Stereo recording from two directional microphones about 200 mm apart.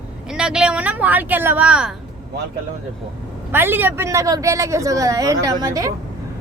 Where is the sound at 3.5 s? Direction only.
10° right (ahead or behind).